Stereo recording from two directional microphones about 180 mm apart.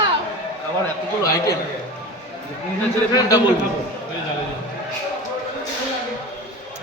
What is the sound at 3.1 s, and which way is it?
Speech, 20° left (ahead or behind).